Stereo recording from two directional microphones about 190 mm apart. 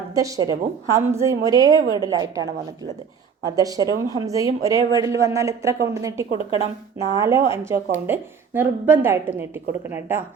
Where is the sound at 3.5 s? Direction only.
20° right (ahead or behind).